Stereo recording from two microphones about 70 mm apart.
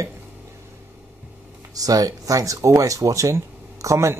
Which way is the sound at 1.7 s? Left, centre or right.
Right.